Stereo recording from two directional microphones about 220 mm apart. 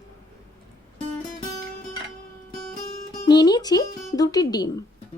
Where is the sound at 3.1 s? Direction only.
20° left (ahead or behind).